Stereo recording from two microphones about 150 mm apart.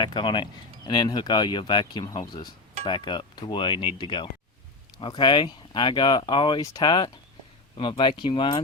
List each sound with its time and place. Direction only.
0.0 s speech: 30° left (ahead or behind)